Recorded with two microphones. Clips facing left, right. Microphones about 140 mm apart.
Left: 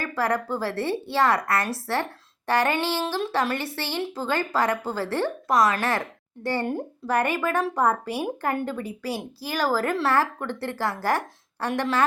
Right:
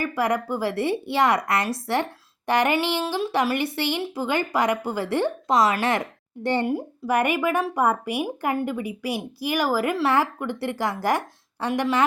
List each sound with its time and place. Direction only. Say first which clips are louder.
0.0 s speech: right 2 dB; 15° right (ahead or behind)
6.7 s speech: right 2 dB; 10° right (ahead or behind)